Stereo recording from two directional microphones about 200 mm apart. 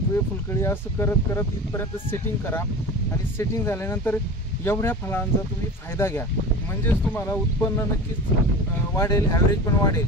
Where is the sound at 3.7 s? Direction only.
10° left (ahead or behind).